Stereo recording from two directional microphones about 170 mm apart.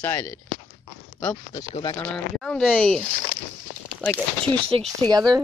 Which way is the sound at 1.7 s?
25° left (ahead or behind).